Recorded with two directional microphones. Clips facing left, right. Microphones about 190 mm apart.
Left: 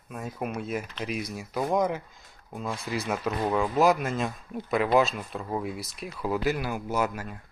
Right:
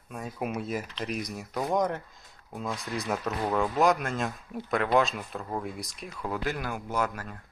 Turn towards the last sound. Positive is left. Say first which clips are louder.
# left 2 dB
turn(degrees=10)  # may be behind; listen again after turning